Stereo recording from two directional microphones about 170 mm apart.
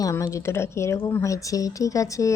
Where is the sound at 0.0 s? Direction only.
20° left (ahead or behind).